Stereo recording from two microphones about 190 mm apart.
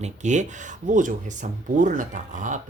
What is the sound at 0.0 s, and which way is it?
Speech, 40° right (ahead or behind).